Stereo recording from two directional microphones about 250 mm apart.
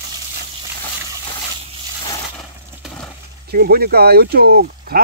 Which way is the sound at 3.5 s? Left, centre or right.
Right.